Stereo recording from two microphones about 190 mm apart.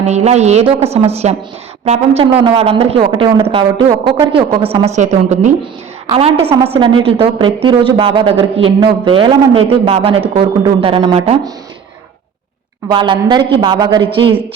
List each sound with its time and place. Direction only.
0.0 s a woman's voice: 35° right (ahead or behind)
12.9 s a woman's voice: 25° right (ahead or behind)